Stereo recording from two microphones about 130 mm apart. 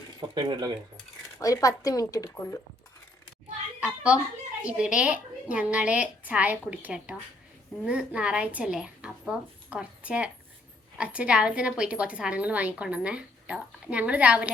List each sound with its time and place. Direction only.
0.2 s speech: 30° right (ahead or behind)
1.4 s a woman's voice: 25° left (ahead or behind)
3.8 s a sound: 10° right (ahead or behind)
4.6 s a woman's voice: 10° right (ahead or behind)